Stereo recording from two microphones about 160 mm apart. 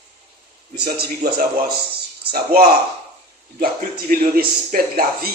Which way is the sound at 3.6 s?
60° right (ahead or behind).